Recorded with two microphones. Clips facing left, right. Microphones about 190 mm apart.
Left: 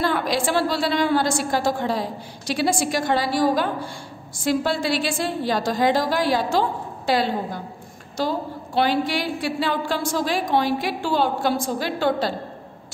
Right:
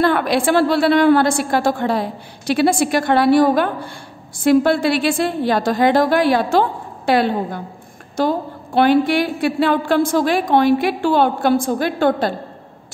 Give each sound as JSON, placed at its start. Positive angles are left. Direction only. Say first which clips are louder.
{"t": 0.0, "sound": "a woman's voice", "louder": "right 6 dB", "side_deg": -60}